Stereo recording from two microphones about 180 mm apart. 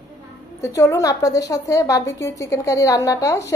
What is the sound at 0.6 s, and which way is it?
A woman's voice, 15° left (ahead or behind).